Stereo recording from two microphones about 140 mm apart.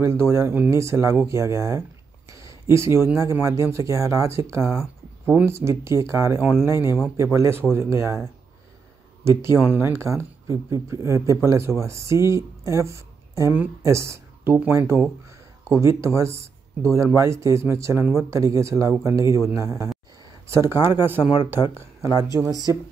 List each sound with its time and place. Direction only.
0.0 s speech: 20° right (ahead or behind)
9.4 s speech: 15° right (ahead or behind)